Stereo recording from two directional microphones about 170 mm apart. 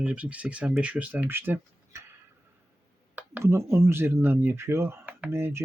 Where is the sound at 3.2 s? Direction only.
15° right (ahead or behind).